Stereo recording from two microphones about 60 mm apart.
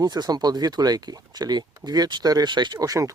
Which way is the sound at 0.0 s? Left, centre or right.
Right.